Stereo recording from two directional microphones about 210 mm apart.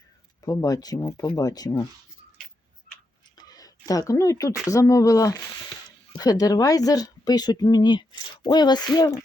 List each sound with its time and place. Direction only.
0.4 s speech: 15° left (ahead or behind)
3.3 s a sound: 20° left (ahead or behind)
4.7 s speech: 15° left (ahead or behind)